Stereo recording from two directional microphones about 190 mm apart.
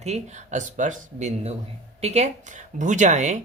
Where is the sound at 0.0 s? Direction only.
35° right (ahead or behind).